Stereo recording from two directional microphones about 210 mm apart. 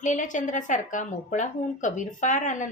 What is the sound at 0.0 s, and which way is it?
A woman's voice, 35° left (ahead or behind).